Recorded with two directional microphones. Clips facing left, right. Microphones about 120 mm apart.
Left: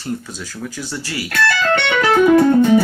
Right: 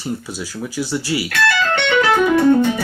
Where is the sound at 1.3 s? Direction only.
45° left (ahead or behind).